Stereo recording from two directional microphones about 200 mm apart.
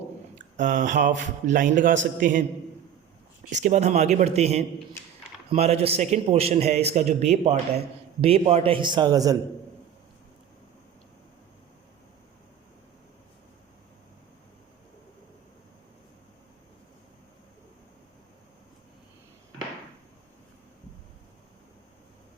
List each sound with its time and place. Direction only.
0.3 s a man's voice: 40° right (ahead or behind)
3.5 s a man's voice: 35° right (ahead or behind); by 9.4 s 20° right (ahead or behind)